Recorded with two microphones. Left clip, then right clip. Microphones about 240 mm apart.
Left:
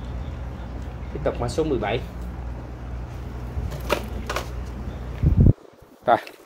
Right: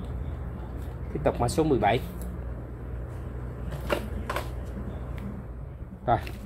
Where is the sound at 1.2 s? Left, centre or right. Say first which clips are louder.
Left 1 dB; right.